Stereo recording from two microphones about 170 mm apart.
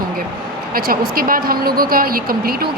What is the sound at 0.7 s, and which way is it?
A woman's voice, 60° right (ahead or behind).